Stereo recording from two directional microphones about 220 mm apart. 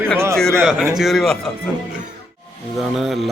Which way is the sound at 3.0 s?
Centre (ahead or behind).